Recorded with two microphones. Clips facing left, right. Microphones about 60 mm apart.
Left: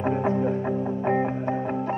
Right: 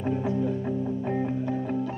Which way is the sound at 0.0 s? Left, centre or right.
Left.